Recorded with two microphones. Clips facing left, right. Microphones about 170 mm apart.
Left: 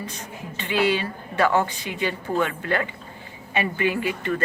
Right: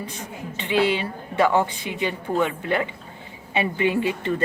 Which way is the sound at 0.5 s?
20° right (ahead or behind).